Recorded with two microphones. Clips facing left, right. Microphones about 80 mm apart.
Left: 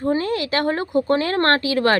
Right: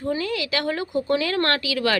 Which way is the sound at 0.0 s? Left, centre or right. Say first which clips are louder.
Left 4 dB; left.